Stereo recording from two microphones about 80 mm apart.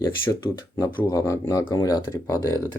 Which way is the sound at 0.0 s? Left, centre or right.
Left.